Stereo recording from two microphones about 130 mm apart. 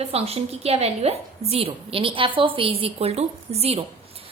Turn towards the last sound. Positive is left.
turn(degrees=-55)  # may be behind; listen again after turning